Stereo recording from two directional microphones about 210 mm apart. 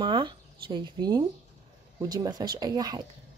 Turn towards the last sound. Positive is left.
turn(degrees=-20)  # may be behind; listen again after turning